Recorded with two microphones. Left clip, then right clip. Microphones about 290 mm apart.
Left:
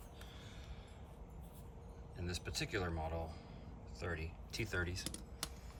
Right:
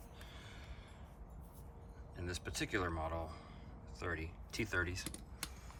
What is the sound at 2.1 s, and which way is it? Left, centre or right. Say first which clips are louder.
Speech: right 1 dB; centre.